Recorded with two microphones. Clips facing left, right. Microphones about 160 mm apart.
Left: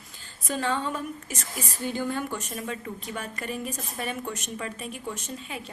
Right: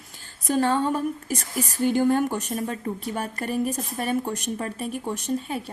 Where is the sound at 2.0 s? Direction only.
45° right (ahead or behind).